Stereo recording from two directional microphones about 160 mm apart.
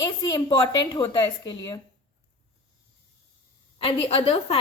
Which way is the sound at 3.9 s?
35° left (ahead or behind).